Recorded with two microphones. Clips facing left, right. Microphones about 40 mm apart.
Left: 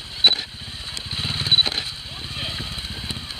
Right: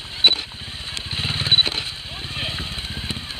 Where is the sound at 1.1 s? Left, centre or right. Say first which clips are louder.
Right 1 dB; centre.